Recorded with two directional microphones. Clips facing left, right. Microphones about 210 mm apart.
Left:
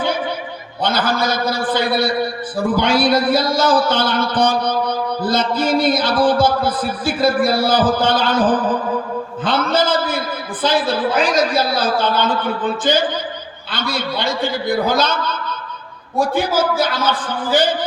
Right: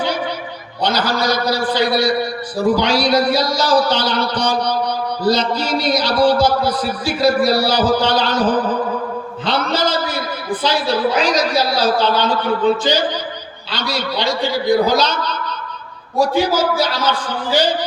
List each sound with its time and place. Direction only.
0.8 s a man's voice: 50° left (ahead or behind)
9.4 s a sound: 50° left (ahead or behind)
10.6 s a man's voice: 50° left (ahead or behind)